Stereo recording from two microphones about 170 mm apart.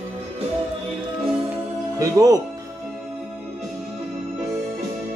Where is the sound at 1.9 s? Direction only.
20° right (ahead or behind).